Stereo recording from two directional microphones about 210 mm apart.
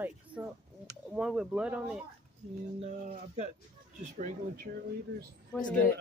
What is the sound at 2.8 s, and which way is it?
Speech, 35° right (ahead or behind).